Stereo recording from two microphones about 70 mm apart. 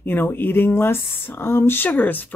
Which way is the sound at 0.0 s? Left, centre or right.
Left.